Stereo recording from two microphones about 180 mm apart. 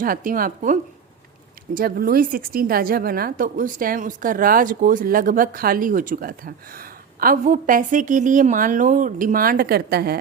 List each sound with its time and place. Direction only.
0.0 s a woman's voice: 50° right (ahead or behind)